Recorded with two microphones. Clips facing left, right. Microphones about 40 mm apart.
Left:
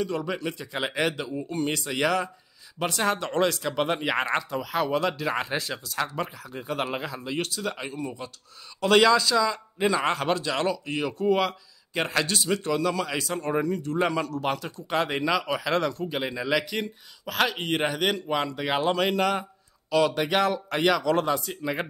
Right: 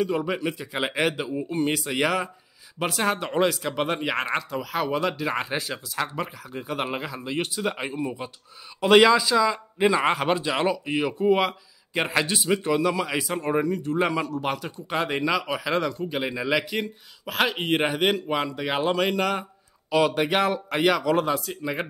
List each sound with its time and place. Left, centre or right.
0.0 s speech: centre
19.9 s speech: centre